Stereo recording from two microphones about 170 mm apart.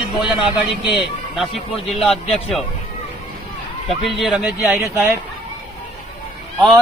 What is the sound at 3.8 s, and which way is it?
Speech, centre (ahead or behind).